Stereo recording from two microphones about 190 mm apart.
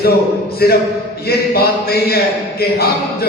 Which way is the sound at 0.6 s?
55° left (ahead or behind).